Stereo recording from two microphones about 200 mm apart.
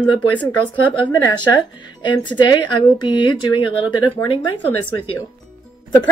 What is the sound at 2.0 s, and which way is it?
Speech, 25° left (ahead or behind).